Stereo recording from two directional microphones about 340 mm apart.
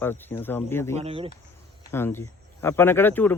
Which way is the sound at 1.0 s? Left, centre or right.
Centre.